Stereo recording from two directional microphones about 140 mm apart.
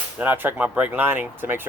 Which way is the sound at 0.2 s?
15° right (ahead or behind).